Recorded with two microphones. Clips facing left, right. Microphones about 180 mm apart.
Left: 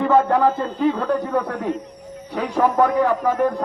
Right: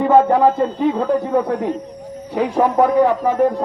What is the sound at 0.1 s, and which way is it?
A man's voice, 15° right (ahead or behind).